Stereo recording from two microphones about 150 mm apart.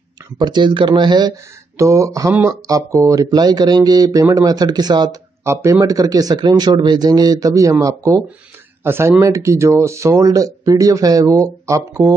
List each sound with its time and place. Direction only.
0.4 s speech: 30° right (ahead or behind)